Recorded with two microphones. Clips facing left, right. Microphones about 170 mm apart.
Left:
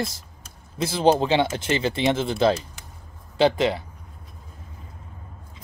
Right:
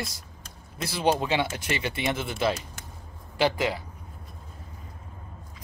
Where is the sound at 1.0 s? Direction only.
30° left (ahead or behind).